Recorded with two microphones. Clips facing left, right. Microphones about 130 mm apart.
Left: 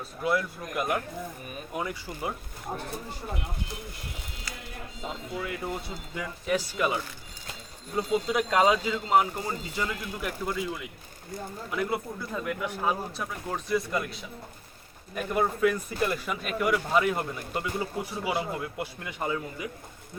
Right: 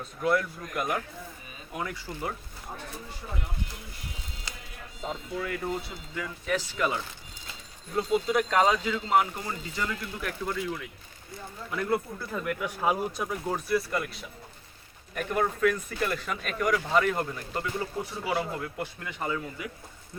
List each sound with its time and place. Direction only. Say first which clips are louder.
0.0 s speech: right 1 dB; 5° left (ahead or behind)
5.4 s speech: right 2 dB; 5° left (ahead or behind)
12.8 s speech: right 4 dB; 10° right (ahead or behind); by 15.4 s 5° left (ahead or behind)
15.4 s speech: left 1 dB; 15° left (ahead or behind)